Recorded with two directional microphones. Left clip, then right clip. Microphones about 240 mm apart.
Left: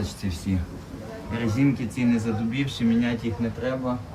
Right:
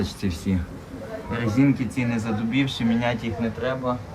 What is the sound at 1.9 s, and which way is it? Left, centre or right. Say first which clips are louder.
Speech: left 1 dB; centre.